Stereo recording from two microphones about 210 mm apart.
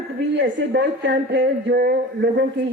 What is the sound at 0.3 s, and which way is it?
A woman's voice, 55° right (ahead or behind).